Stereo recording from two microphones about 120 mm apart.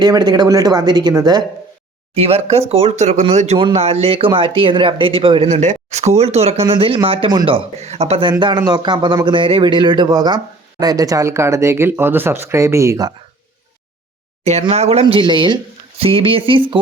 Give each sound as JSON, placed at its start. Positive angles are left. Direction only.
{"t": 0.0, "sound": "a man's voice", "side_deg": -35}
{"t": 2.1, "sound": "a man's voice", "side_deg": -55}
{"t": 3.6, "sound": "speech", "side_deg": -50}
{"t": 5.5, "sound": "speech", "side_deg": -80}
{"t": 6.7, "sound": "speech", "side_deg": -45}
{"t": 8.3, "sound": "a man's voice", "side_deg": -40}
{"t": 14.7, "sound": "speech", "side_deg": -60}
{"t": 15.0, "sound": "a man's voice", "side_deg": -40}
{"t": 16.0, "sound": "speech", "side_deg": -50}